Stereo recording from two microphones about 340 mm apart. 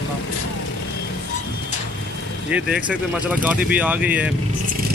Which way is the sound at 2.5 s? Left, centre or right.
Centre.